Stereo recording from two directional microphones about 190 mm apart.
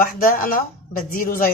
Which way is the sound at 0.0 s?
50° left (ahead or behind).